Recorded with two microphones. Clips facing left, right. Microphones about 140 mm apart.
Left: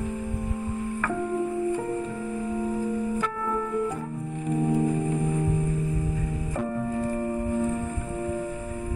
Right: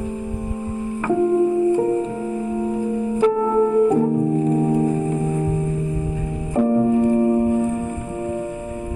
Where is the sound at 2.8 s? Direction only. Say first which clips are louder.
Right 8 dB; 25° right (ahead or behind).